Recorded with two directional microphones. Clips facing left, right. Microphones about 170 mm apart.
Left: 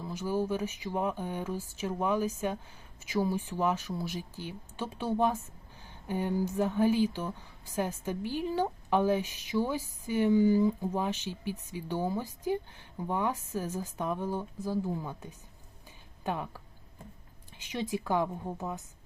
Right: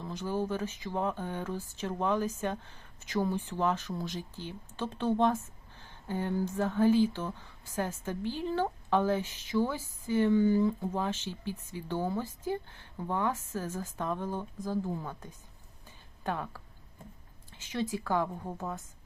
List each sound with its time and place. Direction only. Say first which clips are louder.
0.0 s speech: left 2 dB; 10° left (ahead or behind)
17.6 s speech: even; 15° left (ahead or behind)